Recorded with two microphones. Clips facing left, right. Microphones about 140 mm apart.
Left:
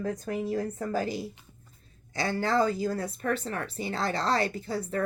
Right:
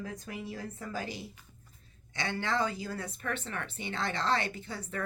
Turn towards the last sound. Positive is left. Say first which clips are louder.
# left 8 dB
turn(degrees=35)  # may be behind; listen again after turning